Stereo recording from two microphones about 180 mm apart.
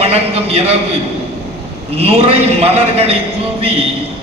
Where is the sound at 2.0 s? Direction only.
35° right (ahead or behind).